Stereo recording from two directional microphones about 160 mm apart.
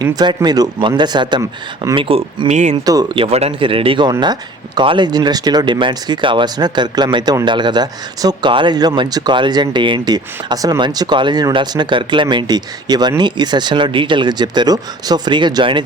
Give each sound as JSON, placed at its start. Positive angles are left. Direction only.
{"t": 0.0, "sound": "speech", "side_deg": -25}
{"t": 2.0, "sound": "speech", "side_deg": -35}
{"t": 2.7, "sound": "speech", "side_deg": -25}
{"t": 3.2, "sound": "speech", "side_deg": -40}